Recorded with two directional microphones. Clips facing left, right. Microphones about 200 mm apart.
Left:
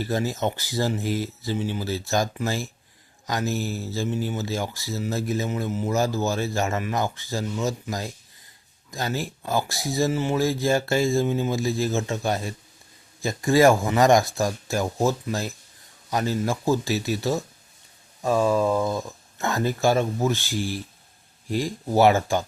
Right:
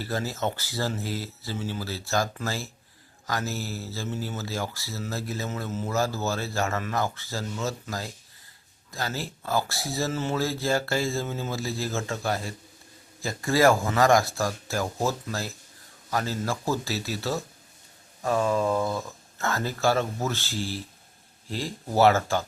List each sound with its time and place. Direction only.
0.0 s speech: 15° left (ahead or behind)